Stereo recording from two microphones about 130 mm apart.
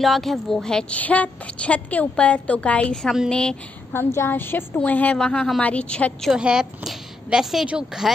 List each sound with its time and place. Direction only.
0.0 s a woman's voice: centre (ahead or behind)
3.9 s a woman's voice: 20° left (ahead or behind)
6.3 s a woman's voice: 5° right (ahead or behind)